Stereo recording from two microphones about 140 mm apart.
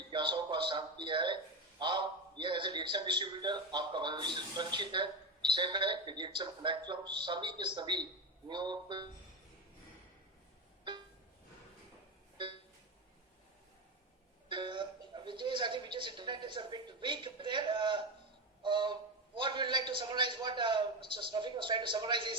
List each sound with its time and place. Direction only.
0.1 s a man's voice: 35° right (ahead or behind)
14.5 s a woman's voice: 35° right (ahead or behind)